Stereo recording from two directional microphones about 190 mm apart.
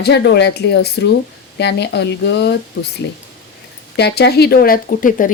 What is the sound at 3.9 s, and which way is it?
Speech, 60° left (ahead or behind).